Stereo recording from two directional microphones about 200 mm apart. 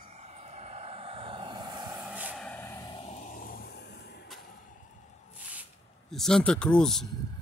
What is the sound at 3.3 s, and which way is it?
Vehicle, 50° left (ahead or behind).